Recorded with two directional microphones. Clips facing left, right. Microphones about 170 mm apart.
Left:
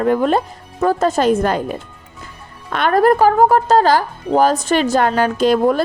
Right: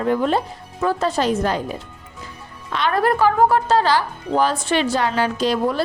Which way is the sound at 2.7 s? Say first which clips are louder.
Left 6 dB; 50° left (ahead or behind).